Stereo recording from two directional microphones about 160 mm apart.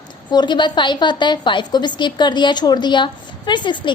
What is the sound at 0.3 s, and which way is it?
A woman's voice, 30° left (ahead or behind).